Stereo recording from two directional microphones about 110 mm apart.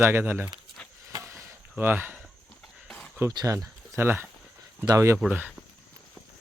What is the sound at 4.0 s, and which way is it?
Speech, 20° right (ahead or behind).